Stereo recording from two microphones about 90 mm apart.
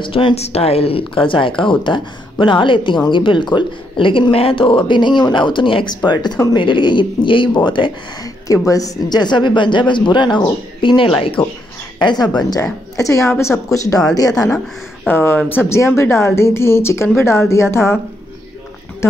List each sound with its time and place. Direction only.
0.0 s speech: 80° left
6.0 s speech: 55° left (ahead or behind)
8.5 s speech: 40° left (ahead or behind); by 10.4 s 60° left (ahead or behind)
10.8 s speech: 70° left (ahead or behind)
12.0 s a woman's voice: 55° left (ahead or behind)
12.5 s a woman's voice: 35° left (ahead or behind)
15.0 s speech: 25° left (ahead or behind)
16.0 s speech: 30° left (ahead or behind)